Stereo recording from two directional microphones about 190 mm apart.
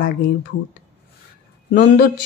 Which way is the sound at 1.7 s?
55° left (ahead or behind).